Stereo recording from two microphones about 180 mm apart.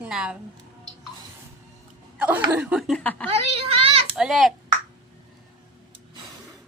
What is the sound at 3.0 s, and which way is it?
Speech, 10° left (ahead or behind).